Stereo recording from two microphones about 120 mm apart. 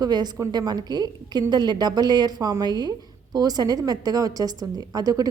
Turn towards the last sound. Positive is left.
turn(degrees=-30)  # may be behind; listen again after turning